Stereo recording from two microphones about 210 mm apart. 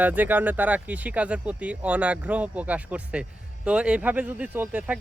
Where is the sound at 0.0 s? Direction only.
10° right (ahead or behind).